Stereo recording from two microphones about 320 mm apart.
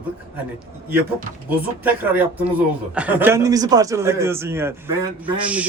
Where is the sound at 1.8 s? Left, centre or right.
Centre.